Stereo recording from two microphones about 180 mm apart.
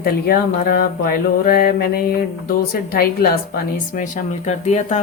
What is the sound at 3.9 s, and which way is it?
A woman's voice, 45° left (ahead or behind).